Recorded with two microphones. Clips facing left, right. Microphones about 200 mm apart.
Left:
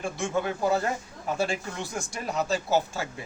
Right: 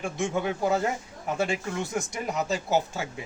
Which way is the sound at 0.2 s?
15° right (ahead or behind).